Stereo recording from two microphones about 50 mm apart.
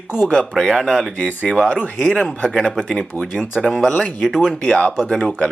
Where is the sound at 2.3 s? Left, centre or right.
Centre.